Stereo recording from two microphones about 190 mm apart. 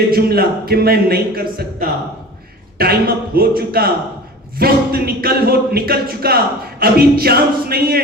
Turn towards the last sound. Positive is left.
turn(degrees=-55)  # may be behind; listen again after turning